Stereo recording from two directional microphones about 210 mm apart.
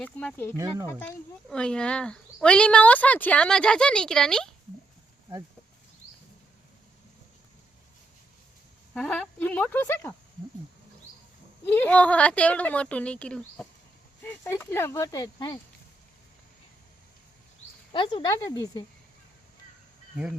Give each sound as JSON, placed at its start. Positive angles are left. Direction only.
{"t": 0.0, "sound": "speech", "side_deg": 5}
{"t": 0.5, "sound": "speech", "side_deg": -15}
{"t": 0.9, "sound": "speech", "side_deg": 10}
{"t": 9.0, "sound": "speech", "side_deg": 5}
{"t": 11.6, "sound": "speech", "side_deg": 10}
{"t": 17.9, "sound": "speech", "side_deg": 25}